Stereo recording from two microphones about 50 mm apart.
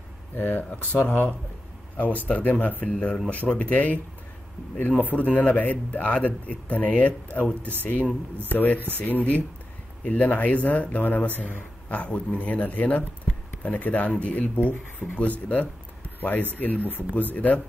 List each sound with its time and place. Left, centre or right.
0.4 s a man's voice: left
3.5 s a man's voice: left